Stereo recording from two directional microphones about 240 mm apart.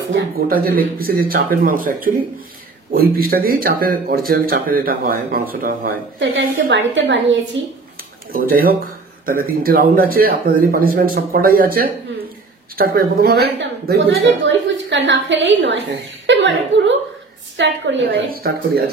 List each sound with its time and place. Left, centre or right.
0.1 s a woman's voice: right
8.3 s a woman's voice: right